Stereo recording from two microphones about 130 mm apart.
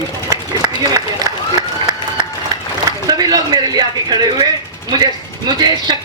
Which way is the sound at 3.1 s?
30° right (ahead or behind).